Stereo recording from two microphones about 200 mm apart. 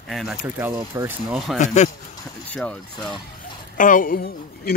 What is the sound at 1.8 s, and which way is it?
Speech, 35° left (ahead or behind).